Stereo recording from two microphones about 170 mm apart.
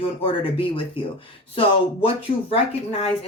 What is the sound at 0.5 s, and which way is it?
Speech, 30° left (ahead or behind).